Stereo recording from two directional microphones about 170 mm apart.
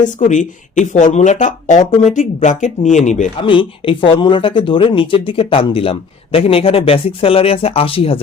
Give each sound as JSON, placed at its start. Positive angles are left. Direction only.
{"t": 0.0, "sound": "speech", "side_deg": 45}
{"t": 3.4, "sound": "speech", "side_deg": 30}